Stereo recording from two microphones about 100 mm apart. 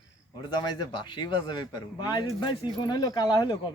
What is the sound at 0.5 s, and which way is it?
A man's voice, 50° left (ahead or behind).